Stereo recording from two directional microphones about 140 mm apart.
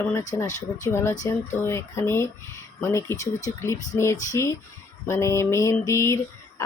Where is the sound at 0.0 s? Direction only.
20° left (ahead or behind).